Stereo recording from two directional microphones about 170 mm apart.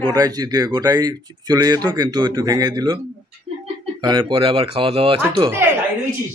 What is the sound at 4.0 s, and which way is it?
Speech, 25° right (ahead or behind).